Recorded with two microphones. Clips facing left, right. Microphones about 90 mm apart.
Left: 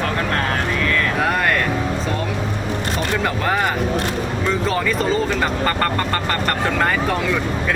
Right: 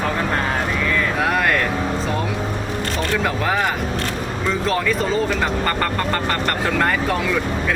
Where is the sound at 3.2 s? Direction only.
Centre (ahead or behind).